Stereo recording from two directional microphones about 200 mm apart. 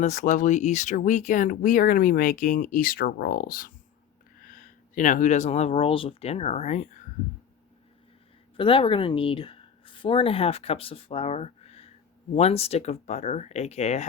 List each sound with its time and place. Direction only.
0.0 s speech: 35° left (ahead or behind)
8.5 s speech: 25° left (ahead or behind)